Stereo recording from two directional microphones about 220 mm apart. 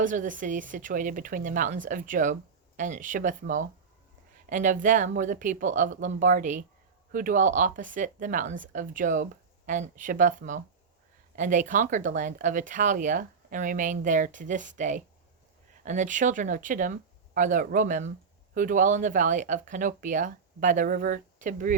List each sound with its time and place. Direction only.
0.0 s speech: 35° right (ahead or behind)